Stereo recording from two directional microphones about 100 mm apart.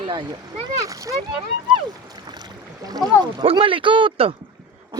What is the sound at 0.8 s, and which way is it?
Speech, 35° right (ahead or behind).